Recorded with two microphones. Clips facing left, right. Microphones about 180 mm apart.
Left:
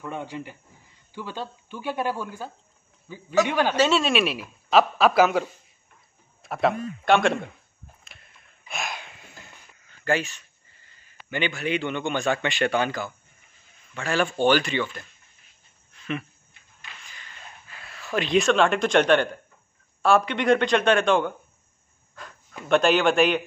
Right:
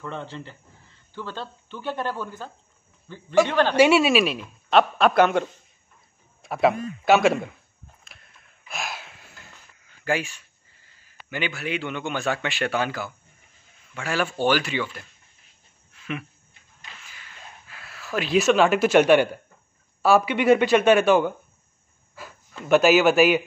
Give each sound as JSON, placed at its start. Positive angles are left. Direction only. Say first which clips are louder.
{"t": 0.0, "sound": "a man's voice", "louder": "left 1 dB", "side_deg": 10}
{"t": 3.7, "sound": "a man's voice", "louder": "right 7 dB", "side_deg": -10}
{"t": 6.4, "sound": "a man's voice", "louder": "right 2 dB", "side_deg": 0}
{"t": 8.0, "sound": "a sound", "louder": "even", "side_deg": 0}
{"t": 10.0, "sound": "a man's voice", "louder": "left 1 dB", "side_deg": -10}
{"t": 15.9, "sound": "a sound", "louder": "left 2 dB", "side_deg": -5}
{"t": 20.0, "sound": "a man's voice", "louder": "right 2 dB", "side_deg": -5}
{"t": 22.1, "sound": "a sound", "louder": "right 1 dB", "side_deg": -5}
{"t": 22.7, "sound": "a man's voice", "louder": "right 3 dB", "side_deg": -5}